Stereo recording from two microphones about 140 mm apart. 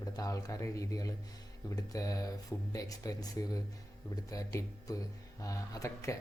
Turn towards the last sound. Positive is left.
turn(degrees=20)  # may be behind; listen again after turning